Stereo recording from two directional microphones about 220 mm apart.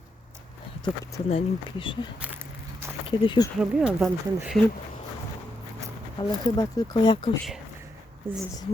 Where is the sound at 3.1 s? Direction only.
20° left (ahead or behind).